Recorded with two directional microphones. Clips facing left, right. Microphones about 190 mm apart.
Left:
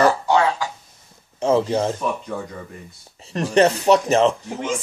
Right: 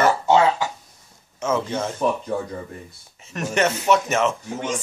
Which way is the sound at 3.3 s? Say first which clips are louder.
Left 5 dB; 35° left (ahead or behind).